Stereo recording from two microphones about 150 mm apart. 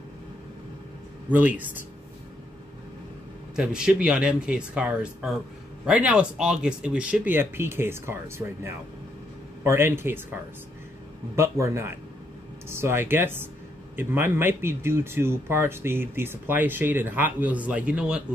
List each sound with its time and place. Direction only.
1.3 s speech: 10° right (ahead or behind)
3.5 s speech: 5° right (ahead or behind)
11.3 s speech: 20° right (ahead or behind)